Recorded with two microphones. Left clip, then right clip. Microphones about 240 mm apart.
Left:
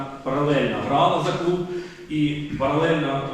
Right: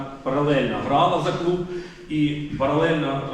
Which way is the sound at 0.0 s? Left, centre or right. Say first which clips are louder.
Right 1 dB; centre.